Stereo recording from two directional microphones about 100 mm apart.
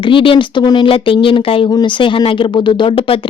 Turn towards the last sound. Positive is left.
turn(degrees=60)  # may be behind; listen again after turning